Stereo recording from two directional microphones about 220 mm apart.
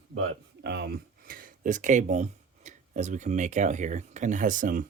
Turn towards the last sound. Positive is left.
turn(degrees=-35)  # may be behind; listen again after turning